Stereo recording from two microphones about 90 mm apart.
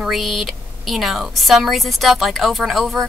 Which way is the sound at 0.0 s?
Centre (ahead or behind).